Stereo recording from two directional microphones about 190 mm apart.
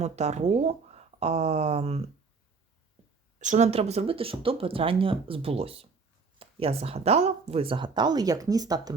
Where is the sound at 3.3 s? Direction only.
40° right (ahead or behind).